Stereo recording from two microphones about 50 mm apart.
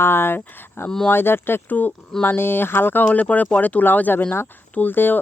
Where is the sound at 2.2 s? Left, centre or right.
Left.